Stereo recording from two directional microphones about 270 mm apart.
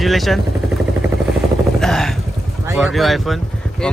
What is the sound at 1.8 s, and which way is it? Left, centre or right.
Speech, centre.